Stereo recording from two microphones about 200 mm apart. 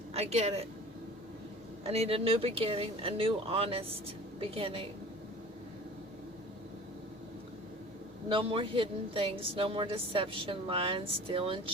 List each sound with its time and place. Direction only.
0.1 s speech: 30° right (ahead or behind)
1.8 s a woman's voice: 30° right (ahead or behind)
8.3 s a woman's voice: 25° right (ahead or behind)